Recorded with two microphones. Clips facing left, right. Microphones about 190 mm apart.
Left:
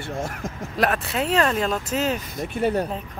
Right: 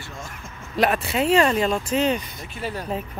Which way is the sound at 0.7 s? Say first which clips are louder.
Right 2 dB; centre (ahead or behind).